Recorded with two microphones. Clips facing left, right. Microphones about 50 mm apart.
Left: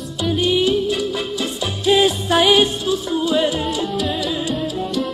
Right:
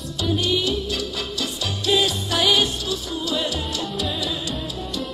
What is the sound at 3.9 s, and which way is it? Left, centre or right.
Music, centre.